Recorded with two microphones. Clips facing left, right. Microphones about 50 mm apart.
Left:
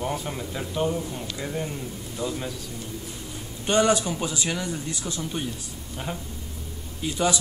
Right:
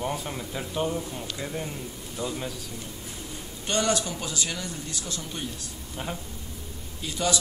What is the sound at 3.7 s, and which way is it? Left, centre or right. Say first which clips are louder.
Speech: left 5 dB; centre.